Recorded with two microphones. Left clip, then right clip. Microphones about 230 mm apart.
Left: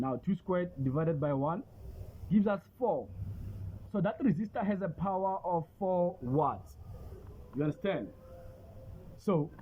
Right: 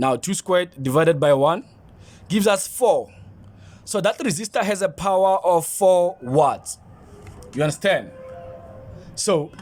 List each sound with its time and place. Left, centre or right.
0.0 s speech: right
6.3 s speech: right
7.6 s speech: right